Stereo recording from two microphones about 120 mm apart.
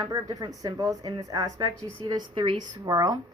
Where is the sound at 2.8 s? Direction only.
35° right (ahead or behind).